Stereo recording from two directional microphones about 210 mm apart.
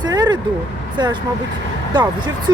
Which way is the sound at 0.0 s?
20° right (ahead or behind).